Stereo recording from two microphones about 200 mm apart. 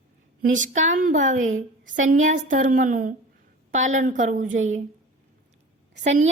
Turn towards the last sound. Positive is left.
turn(degrees=-35)  # may be behind; listen again after turning